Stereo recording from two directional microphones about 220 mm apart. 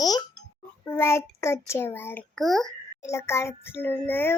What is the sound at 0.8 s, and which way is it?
A woman's voice, 10° left (ahead or behind).